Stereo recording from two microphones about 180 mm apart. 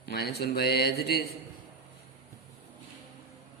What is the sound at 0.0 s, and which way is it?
A man's voice, 65° left (ahead or behind).